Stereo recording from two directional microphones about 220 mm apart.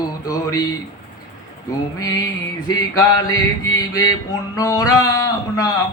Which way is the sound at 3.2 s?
15° left (ahead or behind).